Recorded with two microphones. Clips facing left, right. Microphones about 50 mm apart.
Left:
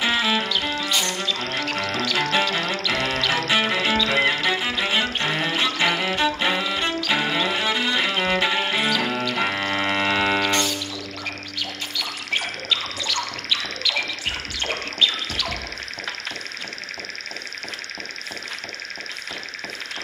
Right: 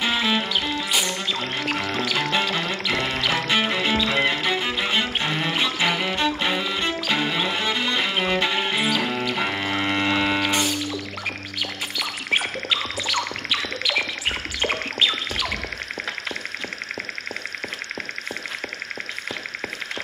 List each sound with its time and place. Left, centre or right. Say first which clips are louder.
0.0 s music: left 1 dB; centre
0.7 s music: even; centre
5.5 s music: left 1 dB; centre
5.8 s music: left 1 dB; centre
10.4 s music: even; centre
12.0 s music: right 3 dB; centre